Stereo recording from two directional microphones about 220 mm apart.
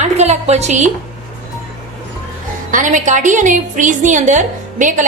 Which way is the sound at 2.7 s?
35° right (ahead or behind).